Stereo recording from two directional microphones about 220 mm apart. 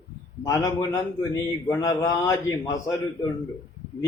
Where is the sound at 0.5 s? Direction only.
15° left (ahead or behind).